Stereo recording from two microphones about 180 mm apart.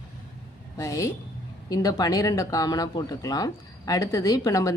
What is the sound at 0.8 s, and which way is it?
Speech, 15° left (ahead or behind).